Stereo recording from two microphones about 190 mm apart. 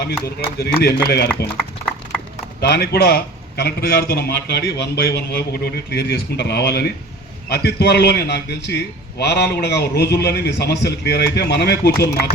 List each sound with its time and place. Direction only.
0.6 s a man's voice: 55° left (ahead or behind)
2.6 s a man's voice: 55° left (ahead or behind)